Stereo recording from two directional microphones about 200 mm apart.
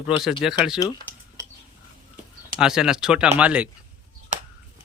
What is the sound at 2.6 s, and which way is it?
Speech, 5° right (ahead or behind).